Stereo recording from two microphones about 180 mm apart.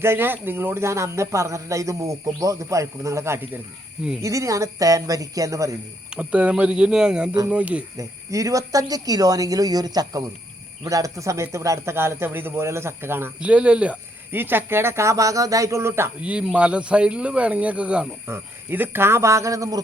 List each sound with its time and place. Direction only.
0.0 s speech: 10° right (ahead or behind)
7.9 s speech: 20° right (ahead or behind)